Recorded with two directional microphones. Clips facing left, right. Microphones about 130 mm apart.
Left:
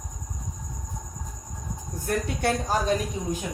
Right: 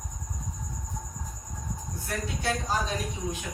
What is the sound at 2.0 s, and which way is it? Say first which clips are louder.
Speech: left 6 dB; 55° left (ahead or behind).